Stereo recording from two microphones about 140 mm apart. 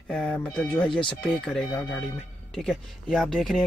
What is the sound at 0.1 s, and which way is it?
Speech, 10° left (ahead or behind).